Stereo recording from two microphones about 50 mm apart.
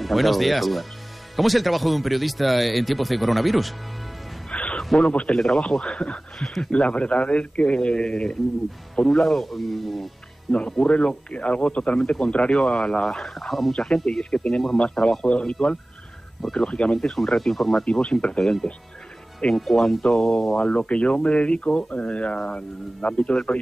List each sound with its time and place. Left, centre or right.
0.0 s speech: centre
4.5 s music: left
4.9 s speech: left; by 10.0 s centre
10.5 s speech: left; by 13.7 s centre
13.7 s speech: centre
16.5 s speech: centre
17.2 s speech: centre
18.0 s speech: centre